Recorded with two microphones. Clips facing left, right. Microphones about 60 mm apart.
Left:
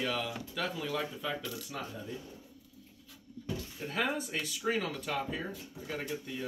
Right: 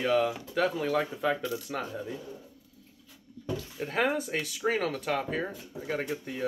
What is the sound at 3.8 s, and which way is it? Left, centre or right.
Speech, right.